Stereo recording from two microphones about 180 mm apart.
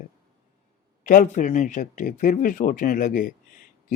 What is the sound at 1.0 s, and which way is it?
A man's voice, 45° left (ahead or behind).